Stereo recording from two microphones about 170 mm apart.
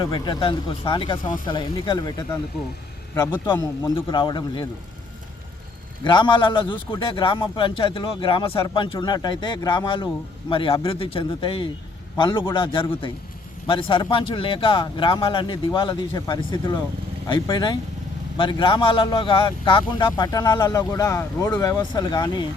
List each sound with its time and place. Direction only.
0.0 s speech: 25° left (ahead or behind)
6.1 s a man's voice: 30° left (ahead or behind)